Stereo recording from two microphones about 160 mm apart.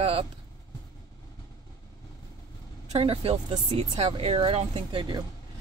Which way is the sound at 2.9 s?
35° right (ahead or behind).